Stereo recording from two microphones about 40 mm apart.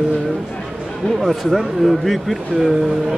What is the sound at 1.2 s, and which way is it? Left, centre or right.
Speech, centre.